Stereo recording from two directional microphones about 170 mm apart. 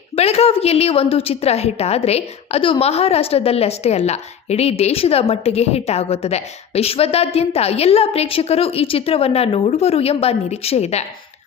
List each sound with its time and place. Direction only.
0.2 s a woman's voice: 35° left (ahead or behind)